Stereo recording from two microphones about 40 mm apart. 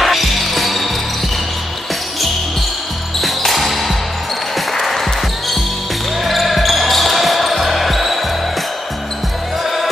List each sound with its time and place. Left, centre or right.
0.0 s basketball bounce: centre
3.2 s music: centre
4.6 s basketball bounce: centre
6.2 s basketball bounce: centre